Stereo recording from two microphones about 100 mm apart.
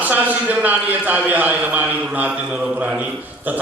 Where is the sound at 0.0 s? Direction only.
15° right (ahead or behind).